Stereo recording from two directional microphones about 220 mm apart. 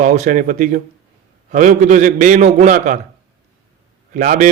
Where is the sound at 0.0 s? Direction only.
35° right (ahead or behind).